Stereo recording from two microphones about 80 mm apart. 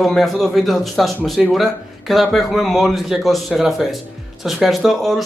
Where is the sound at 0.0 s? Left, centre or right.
Centre.